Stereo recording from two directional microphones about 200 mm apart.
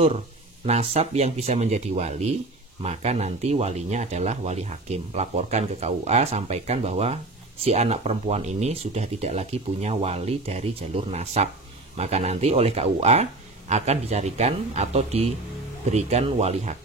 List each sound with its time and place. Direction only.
0.7 s speech: 30° right (ahead or behind)